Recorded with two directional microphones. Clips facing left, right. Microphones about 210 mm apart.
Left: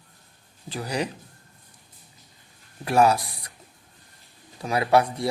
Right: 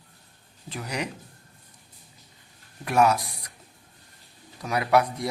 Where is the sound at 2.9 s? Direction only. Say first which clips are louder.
Left 2 dB; 30° left (ahead or behind).